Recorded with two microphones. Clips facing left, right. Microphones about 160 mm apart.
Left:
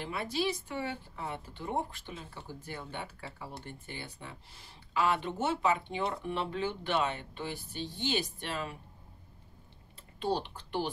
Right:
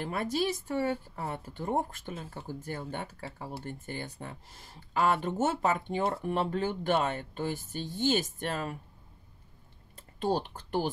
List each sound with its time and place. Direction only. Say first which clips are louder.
0.0 s speech: right 3 dB; 45° right (ahead or behind)
9.9 s speech: right 3 dB; 45° right (ahead or behind)